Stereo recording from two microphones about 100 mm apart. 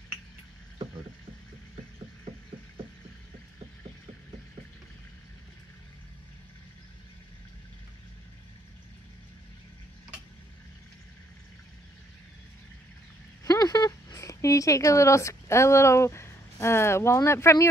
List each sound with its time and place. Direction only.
13.4 s speech: 40° left (ahead or behind)